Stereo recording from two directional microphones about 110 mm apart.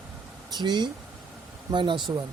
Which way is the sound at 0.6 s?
40° right (ahead or behind).